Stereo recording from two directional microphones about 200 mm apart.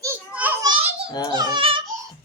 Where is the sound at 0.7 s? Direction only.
25° right (ahead or behind).